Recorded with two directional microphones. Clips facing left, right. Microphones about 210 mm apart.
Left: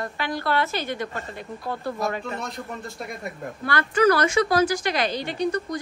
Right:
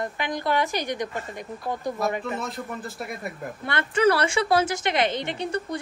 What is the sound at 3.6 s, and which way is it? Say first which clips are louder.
A woman's voice: left 1 dB; 25° right (ahead or behind).